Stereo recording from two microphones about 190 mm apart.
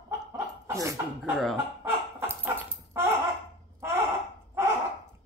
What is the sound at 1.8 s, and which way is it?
Dog, 10° right (ahead or behind).